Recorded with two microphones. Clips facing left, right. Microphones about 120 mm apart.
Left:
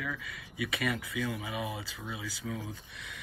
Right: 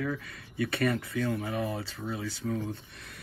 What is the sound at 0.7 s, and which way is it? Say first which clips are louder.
Speech: right 5 dB; centre (ahead or behind).